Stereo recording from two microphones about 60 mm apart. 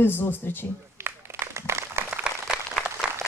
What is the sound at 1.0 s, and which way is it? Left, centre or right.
Applause, right.